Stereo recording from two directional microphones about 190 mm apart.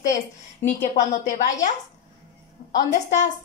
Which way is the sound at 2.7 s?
40° left (ahead or behind).